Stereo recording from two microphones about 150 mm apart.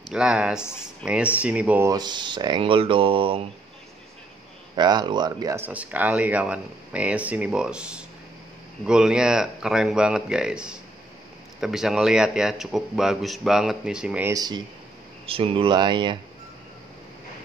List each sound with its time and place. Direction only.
0.1 s a man's voice: 5° right (ahead or behind)
1.9 s speech: 25° right (ahead or behind)
4.7 s speech: 25° right (ahead or behind)
5.6 s a man's voice: 10° right (ahead or behind)
14.3 s speech: 25° right (ahead or behind)
15.2 s speech: 40° right (ahead or behind)